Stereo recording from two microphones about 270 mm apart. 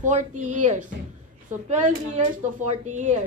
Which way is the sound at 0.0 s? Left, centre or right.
Right.